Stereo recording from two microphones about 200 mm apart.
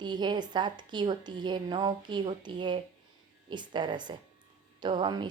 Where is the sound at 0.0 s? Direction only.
20° right (ahead or behind).